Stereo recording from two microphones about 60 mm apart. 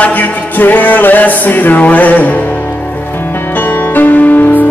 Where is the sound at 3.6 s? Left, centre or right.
Left.